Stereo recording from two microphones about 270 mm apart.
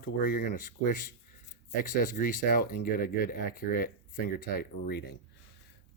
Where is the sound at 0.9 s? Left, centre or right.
Left.